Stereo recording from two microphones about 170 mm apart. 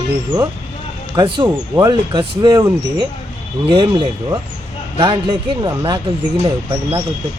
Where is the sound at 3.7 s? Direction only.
30° right (ahead or behind).